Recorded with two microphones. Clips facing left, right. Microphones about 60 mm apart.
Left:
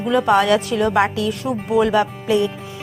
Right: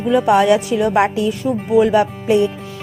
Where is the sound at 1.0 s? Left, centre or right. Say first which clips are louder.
Right 3 dB; right.